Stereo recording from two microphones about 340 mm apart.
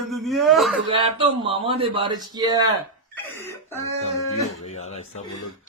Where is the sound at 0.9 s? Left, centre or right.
Centre.